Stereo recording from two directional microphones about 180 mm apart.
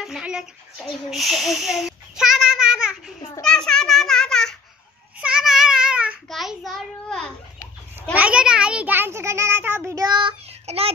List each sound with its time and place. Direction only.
0.0 s a sound: 5° right (ahead or behind)
5.2 s babbling: 5° right (ahead or behind)
8.1 s a child's voice: 5° right (ahead or behind); by 10.9 s 30° right (ahead or behind)